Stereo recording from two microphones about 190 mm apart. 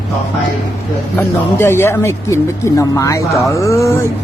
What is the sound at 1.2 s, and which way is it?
Speech, 10° left (ahead or behind).